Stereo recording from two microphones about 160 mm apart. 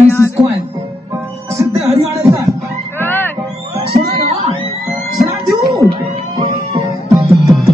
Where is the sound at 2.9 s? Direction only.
15° left (ahead or behind).